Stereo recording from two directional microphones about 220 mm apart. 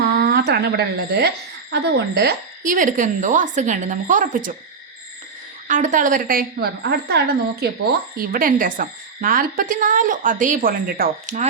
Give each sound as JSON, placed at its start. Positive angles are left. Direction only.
{"t": 0.0, "sound": "a sound", "side_deg": -45}
{"t": 1.7, "sound": "a woman's voice", "side_deg": -50}
{"t": 5.6, "sound": "a woman's voice", "side_deg": -35}